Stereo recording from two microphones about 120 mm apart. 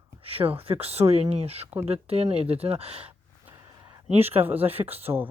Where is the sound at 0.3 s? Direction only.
50° right (ahead or behind).